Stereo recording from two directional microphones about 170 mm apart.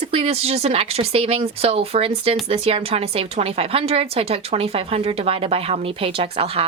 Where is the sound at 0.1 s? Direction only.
35° right (ahead or behind).